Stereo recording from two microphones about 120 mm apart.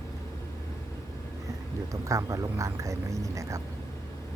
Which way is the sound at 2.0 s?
30° right (ahead or behind).